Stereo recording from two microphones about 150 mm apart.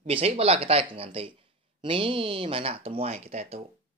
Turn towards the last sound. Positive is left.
turn(degrees=-45)  # may be behind; listen again after turning